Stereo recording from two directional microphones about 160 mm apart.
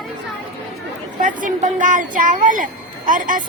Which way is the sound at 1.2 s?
55° right (ahead or behind).